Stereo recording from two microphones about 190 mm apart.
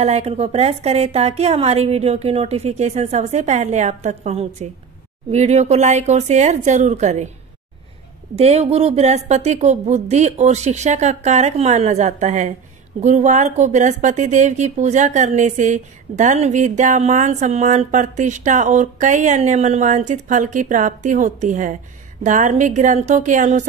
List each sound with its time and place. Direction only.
0.0 s speech: 35° right (ahead or behind)
8.4 s speech: 35° right (ahead or behind)